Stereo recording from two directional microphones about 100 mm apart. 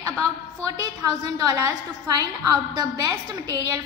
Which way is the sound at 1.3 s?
35° right (ahead or behind).